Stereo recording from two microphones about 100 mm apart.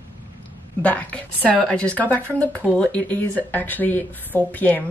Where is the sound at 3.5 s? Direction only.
15° left (ahead or behind).